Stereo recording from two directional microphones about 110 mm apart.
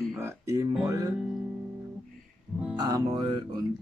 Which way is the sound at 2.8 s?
35° right (ahead or behind).